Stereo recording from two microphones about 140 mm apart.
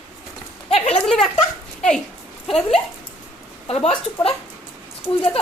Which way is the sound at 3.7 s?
45° left (ahead or behind).